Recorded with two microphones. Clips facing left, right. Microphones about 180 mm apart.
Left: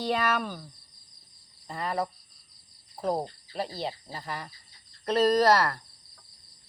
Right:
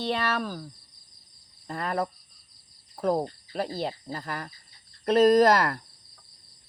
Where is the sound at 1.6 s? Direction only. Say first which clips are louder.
Right 2 dB; 55° right (ahead or behind).